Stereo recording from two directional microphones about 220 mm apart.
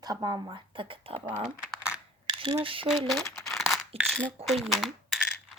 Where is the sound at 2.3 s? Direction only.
25° right (ahead or behind).